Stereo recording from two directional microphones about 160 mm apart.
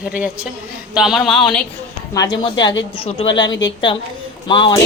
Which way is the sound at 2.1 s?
25° left (ahead or behind).